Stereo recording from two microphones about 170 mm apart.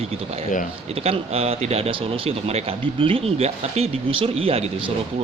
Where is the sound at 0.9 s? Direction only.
35° right (ahead or behind).